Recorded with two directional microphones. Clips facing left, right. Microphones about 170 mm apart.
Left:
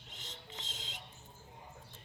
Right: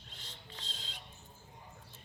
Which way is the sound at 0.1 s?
20° left (ahead or behind).